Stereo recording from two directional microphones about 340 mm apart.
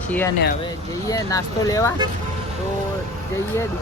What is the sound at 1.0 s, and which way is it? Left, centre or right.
Speech, centre.